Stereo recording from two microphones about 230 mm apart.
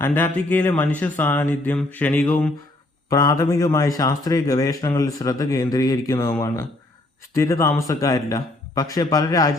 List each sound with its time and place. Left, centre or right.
0.0 s a man's voice: centre
7.3 s a man's voice: centre